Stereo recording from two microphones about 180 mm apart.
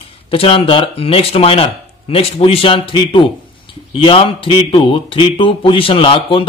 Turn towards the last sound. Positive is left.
turn(degrees=30)  # may be behind; listen again after turning